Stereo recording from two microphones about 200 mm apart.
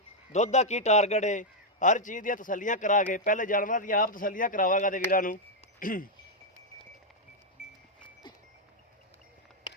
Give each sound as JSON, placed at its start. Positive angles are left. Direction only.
{"t": 0.3, "sound": "a man's voice", "side_deg": 35}